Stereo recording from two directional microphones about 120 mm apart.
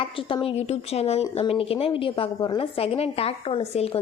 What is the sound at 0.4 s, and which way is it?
Speech, 60° left (ahead or behind).